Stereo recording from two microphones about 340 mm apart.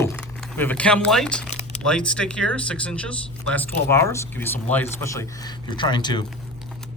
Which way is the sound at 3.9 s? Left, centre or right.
Centre.